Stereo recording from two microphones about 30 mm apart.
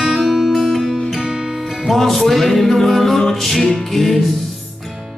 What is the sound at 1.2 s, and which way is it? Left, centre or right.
Music, right.